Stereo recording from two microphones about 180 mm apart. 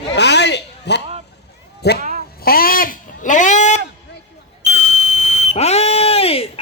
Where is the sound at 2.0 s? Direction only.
45° right (ahead or behind).